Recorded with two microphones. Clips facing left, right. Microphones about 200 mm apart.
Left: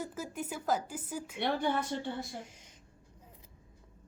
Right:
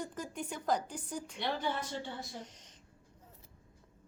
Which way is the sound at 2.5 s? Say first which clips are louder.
Left 2 dB; 10° left (ahead or behind).